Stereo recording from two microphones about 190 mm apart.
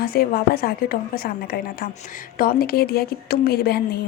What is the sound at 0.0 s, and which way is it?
Speech, 50° left (ahead or behind).